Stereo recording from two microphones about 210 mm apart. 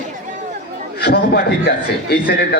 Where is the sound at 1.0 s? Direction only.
50° left (ahead or behind).